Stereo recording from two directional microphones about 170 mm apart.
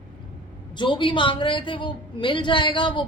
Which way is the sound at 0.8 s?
30° left (ahead or behind).